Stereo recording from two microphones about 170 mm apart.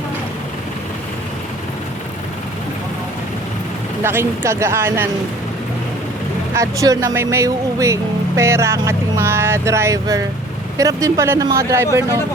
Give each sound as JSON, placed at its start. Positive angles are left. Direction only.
{"t": 4.0, "sound": "speech", "side_deg": -15}
{"t": 6.5, "sound": "speech", "side_deg": -20}